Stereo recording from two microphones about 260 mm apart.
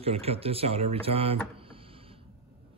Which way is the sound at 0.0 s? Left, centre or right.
Right.